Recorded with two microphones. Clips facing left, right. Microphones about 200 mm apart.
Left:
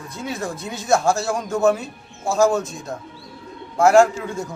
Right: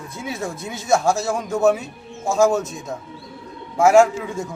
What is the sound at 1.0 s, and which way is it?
A man's voice, 5° right (ahead or behind).